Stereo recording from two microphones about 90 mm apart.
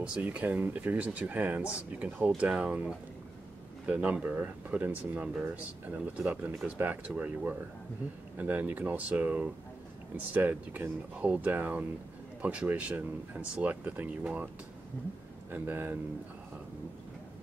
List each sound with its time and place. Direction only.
0.0 s speech: 15° right (ahead or behind)
15.5 s speech: 20° right (ahead or behind)